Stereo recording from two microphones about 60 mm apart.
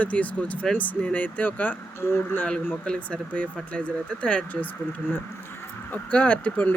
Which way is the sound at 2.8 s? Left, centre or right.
Centre.